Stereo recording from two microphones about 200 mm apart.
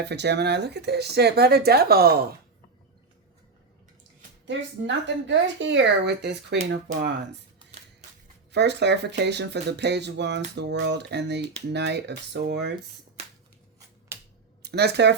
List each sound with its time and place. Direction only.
0.0 s speech: 55° right (ahead or behind)
4.4 s speech: 65° right (ahead or behind)
8.5 s speech: 60° right (ahead or behind)
14.1 s a sound: 10° right (ahead or behind)
14.6 s speech: 55° right (ahead or behind)